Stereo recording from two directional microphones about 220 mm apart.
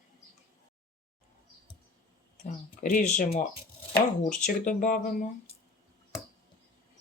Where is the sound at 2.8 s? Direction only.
40° left (ahead or behind).